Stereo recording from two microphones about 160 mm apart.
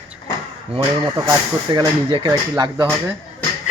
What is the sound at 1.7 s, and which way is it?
Speech, 30° right (ahead or behind).